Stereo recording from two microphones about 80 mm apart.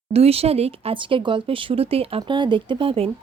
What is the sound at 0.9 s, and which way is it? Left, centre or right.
Speech, right.